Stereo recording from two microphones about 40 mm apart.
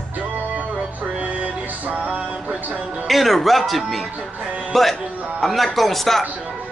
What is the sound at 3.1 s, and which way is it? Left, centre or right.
A man's voice, centre.